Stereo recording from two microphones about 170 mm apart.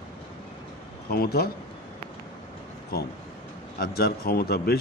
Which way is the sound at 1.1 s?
65° left (ahead or behind).